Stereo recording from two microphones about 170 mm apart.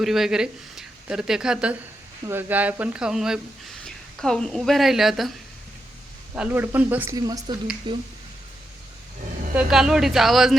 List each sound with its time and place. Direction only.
0.0 s speech: centre (ahead or behind)
6.3 s speech: 10° right (ahead or behind)
7.2 s speech: 20° right (ahead or behind)
9.6 s speech: 5° right (ahead or behind)